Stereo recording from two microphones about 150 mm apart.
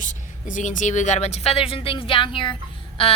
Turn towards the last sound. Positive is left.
turn(degrees=35)  # may be behind; listen again after turning